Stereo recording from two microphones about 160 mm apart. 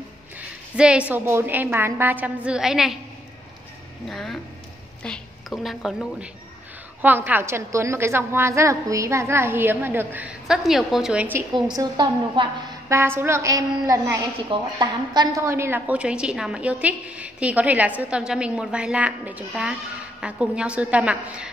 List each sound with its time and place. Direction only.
0.7 s a woman's voice: 5° right (ahead or behind)
4.1 s a woman's voice: centre (ahead or behind)
11.5 s a woman's voice: 25° right (ahead or behind); by 21.5 s 5° right (ahead or behind)